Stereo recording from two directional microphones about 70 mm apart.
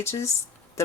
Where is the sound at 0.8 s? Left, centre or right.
Left.